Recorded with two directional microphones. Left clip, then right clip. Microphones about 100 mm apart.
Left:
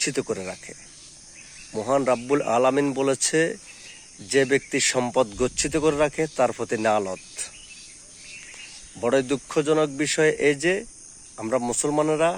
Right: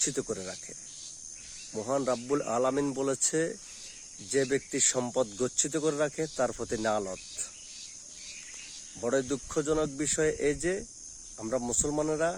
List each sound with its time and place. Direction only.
0.0 s speech: 15° right (ahead or behind)
1.7 s speech: 20° right (ahead or behind)
9.0 s speech: 10° right (ahead or behind)